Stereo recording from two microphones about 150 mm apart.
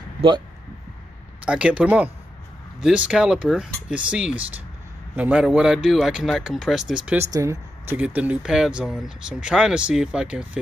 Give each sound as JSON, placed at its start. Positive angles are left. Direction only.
{"t": 1.4, "sound": "speech", "side_deg": -5}
{"t": 7.2, "sound": "speech", "side_deg": -20}